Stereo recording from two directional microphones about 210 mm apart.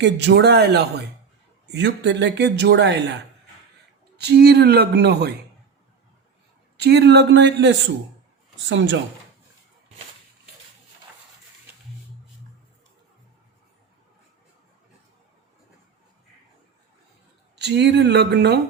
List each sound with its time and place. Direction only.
0.0 s speech: 55° right (ahead or behind)
4.2 s speech: 50° right (ahead or behind)
6.7 s speech: 55° right (ahead or behind)
17.6 s speech: 55° right (ahead or behind)